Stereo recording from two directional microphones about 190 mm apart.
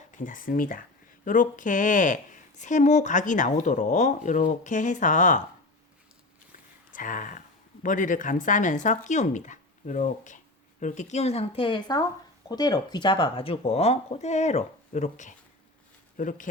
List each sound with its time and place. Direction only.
0.1 s speech: 45° left (ahead or behind)
6.9 s speech: 45° left (ahead or behind)